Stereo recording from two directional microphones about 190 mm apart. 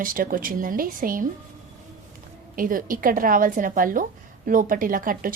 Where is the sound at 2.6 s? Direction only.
45° right (ahead or behind).